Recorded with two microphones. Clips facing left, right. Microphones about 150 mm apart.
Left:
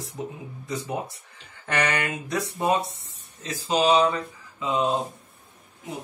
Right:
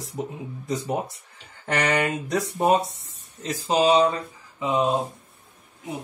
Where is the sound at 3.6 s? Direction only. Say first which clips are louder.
Right 1 dB; 35° right (ahead or behind).